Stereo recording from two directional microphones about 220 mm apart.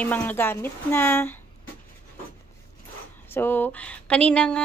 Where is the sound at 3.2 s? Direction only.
10° left (ahead or behind).